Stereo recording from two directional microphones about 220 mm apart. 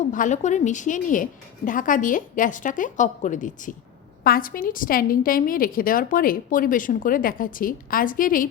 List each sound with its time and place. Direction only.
0.1 s a woman's voice: 35° left (ahead or behind)